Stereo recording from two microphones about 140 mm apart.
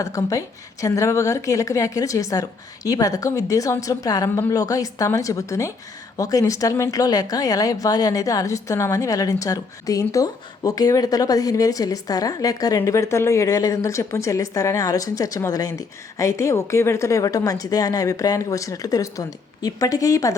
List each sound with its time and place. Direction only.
0.0 s speech: 25° left (ahead or behind)